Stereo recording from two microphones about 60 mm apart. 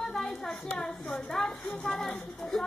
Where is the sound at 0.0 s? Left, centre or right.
Centre.